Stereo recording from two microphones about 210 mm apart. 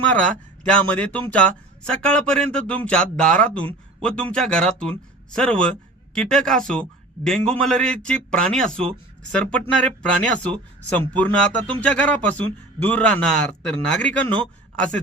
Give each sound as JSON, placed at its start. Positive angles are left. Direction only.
{"t": 0.1, "sound": "speech", "side_deg": 5}